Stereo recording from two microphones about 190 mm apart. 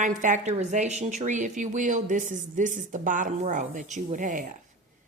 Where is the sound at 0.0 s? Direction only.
40° right (ahead or behind).